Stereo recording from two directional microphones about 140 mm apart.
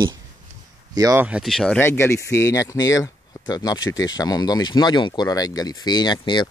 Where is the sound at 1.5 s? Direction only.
5° left (ahead or behind).